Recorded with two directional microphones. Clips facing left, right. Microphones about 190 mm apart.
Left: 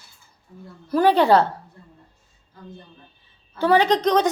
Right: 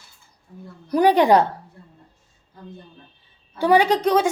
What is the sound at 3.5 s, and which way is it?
Speech, 15° right (ahead or behind).